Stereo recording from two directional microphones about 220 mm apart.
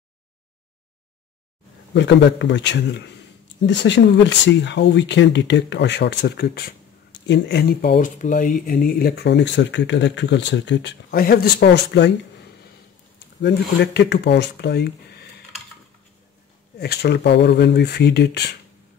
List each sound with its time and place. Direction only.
2.0 s speech: 50° left (ahead or behind)
13.4 s speech: 50° left (ahead or behind)
16.7 s speech: 45° left (ahead or behind)